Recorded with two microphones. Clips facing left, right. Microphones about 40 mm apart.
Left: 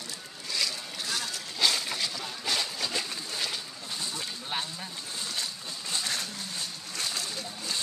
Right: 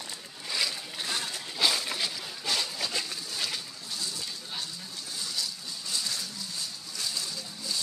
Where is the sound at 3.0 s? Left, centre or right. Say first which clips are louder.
Left 1 dB; centre.